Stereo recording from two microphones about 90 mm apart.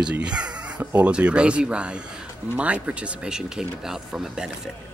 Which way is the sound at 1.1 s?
10° right (ahead or behind).